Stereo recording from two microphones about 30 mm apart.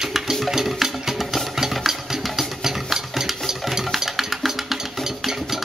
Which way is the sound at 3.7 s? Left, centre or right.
Centre.